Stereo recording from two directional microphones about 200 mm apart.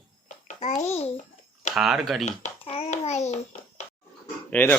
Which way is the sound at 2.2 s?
30° left (ahead or behind).